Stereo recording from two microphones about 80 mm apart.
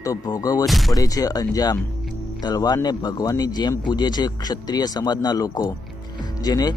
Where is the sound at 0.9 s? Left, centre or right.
Left.